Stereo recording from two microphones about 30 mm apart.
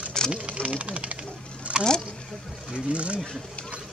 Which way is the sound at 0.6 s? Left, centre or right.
Right.